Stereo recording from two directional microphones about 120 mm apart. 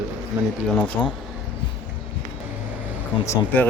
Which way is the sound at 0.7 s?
10° left (ahead or behind).